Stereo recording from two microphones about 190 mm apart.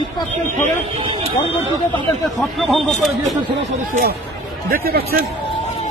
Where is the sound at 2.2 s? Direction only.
Centre (ahead or behind).